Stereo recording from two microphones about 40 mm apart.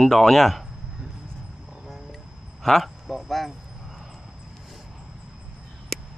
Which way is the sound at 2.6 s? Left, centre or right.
Centre.